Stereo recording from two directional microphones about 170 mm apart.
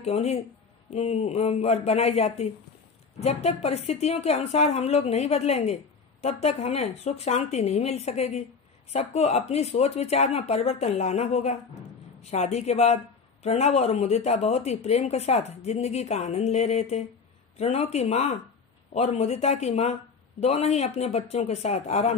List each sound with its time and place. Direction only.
0.0 s a woman's voice: 40° left (ahead or behind)